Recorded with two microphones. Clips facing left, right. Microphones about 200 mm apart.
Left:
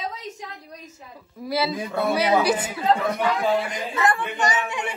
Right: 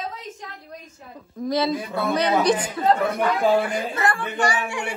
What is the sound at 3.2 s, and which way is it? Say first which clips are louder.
Speech: right 3 dB; 50° right (ahead or behind).